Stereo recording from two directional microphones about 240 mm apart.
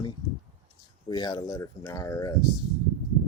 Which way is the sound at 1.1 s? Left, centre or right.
Centre.